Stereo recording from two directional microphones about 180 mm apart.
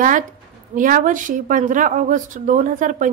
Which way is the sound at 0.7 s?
50° right (ahead or behind).